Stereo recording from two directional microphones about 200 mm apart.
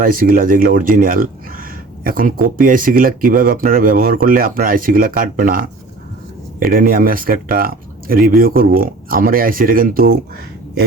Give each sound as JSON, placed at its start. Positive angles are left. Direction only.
{"t": 0.0, "sound": "speech", "side_deg": -45}